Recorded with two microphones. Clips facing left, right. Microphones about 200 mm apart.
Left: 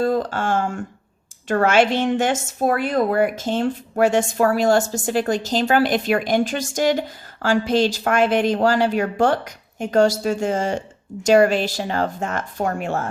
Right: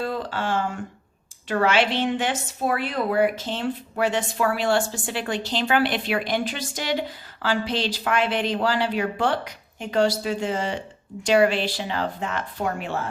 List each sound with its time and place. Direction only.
0.0 s speech: 45° left (ahead or behind)